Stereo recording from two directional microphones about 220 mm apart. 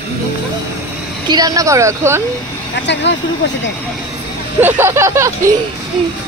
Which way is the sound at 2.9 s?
55° left (ahead or behind).